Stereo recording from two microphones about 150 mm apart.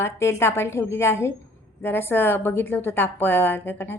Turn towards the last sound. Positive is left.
turn(degrees=15)  # may be behind; listen again after turning